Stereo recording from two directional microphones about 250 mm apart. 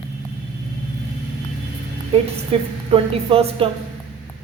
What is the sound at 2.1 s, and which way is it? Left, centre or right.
A woman's voice, right.